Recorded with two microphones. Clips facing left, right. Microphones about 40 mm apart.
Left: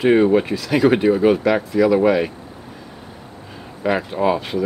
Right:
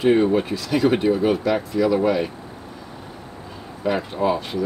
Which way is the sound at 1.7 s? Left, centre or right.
Centre.